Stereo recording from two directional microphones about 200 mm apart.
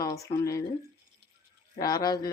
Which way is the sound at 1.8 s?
20° left (ahead or behind).